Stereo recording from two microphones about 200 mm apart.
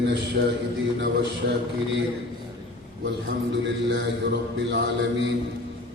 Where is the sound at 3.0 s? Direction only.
65° right (ahead or behind).